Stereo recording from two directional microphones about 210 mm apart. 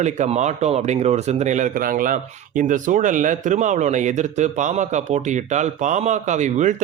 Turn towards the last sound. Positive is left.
turn(degrees=-35)  # may be behind; listen again after turning